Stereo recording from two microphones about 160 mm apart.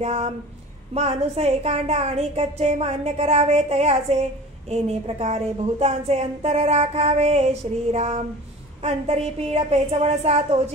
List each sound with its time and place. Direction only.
0.0 s a woman's voice: 40° right (ahead or behind)